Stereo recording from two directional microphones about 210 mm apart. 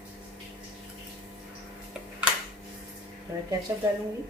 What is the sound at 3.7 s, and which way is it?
Speech, 15° right (ahead or behind).